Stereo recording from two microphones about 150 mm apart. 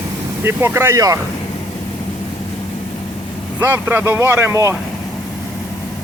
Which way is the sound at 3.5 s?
15° right (ahead or behind).